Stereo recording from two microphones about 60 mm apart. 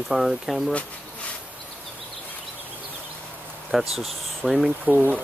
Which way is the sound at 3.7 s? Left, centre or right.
Centre.